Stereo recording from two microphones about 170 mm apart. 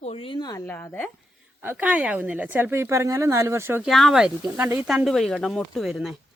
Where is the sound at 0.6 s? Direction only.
10° left (ahead or behind).